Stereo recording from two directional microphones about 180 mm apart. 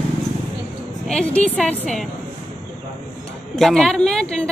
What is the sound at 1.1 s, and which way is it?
Speech, 5° left (ahead or behind).